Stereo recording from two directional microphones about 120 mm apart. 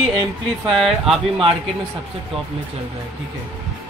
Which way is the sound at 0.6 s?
Centre (ahead or behind).